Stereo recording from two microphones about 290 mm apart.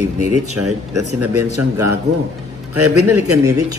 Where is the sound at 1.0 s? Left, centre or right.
Right.